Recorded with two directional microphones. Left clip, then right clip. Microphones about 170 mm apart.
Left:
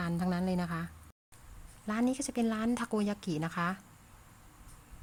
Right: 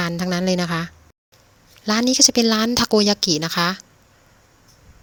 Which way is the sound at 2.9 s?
25° right (ahead or behind).